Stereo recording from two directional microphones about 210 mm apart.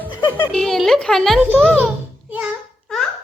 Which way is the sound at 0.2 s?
20° left (ahead or behind).